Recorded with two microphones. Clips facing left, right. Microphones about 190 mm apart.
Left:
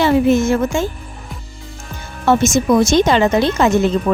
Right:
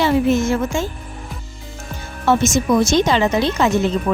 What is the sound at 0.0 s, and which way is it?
Speech, 55° left (ahead or behind).